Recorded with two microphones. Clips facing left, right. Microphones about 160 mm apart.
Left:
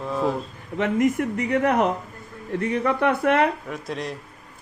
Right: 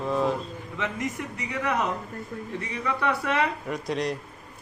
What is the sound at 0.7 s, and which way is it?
Speech, 55° left (ahead or behind).